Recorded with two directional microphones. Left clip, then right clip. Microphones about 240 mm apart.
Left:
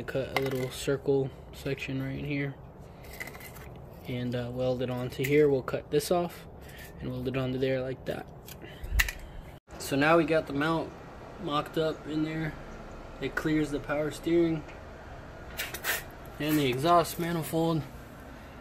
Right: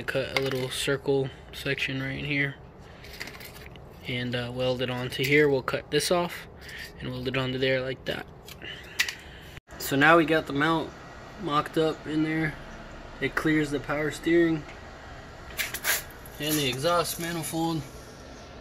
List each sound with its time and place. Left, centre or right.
0.0 s speech: centre
4.0 s speech: centre
9.8 s speech: centre
16.3 s speech: centre